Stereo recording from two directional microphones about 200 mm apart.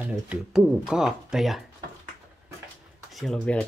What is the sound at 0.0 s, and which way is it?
Speech, 5° right (ahead or behind).